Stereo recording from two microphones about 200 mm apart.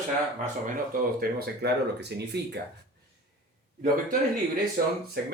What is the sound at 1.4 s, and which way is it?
Speech, 55° right (ahead or behind).